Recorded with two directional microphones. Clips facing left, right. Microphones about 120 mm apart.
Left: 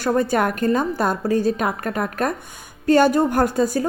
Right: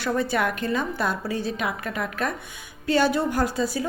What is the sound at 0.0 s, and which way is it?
A woman's voice, 45° left (ahead or behind).